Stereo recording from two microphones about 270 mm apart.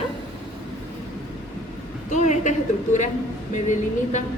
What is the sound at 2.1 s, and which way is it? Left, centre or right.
Speech, left.